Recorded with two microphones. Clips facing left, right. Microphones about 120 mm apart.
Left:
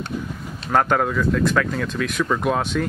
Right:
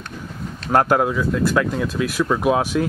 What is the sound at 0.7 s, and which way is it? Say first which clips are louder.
Speech: right 2 dB; 10° right (ahead or behind).